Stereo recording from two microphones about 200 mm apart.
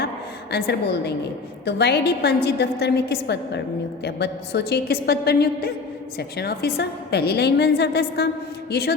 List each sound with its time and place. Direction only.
0.5 s a woman's voice: 55° left (ahead or behind)